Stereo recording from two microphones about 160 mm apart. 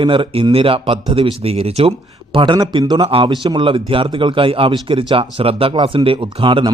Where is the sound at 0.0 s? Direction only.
30° right (ahead or behind).